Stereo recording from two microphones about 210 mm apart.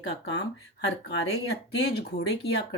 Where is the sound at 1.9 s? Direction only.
50° left (ahead or behind).